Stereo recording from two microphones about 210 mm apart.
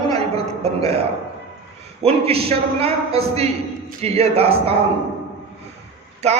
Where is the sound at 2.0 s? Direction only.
30° right (ahead or behind).